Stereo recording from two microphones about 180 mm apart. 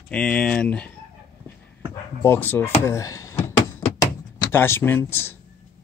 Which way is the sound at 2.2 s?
10° left (ahead or behind).